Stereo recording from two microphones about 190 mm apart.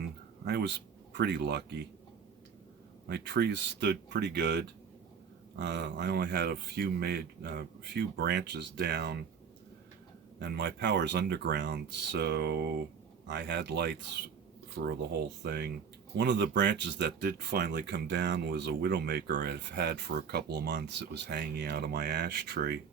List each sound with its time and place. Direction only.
0.4 s a man's voice: 65° right (ahead or behind)
3.1 s speech: 60° right (ahead or behind)
10.4 s speech: 60° right (ahead or behind)
16.1 s speech: 70° right (ahead or behind)